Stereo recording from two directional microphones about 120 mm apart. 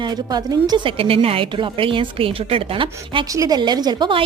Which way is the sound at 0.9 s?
50° right (ahead or behind).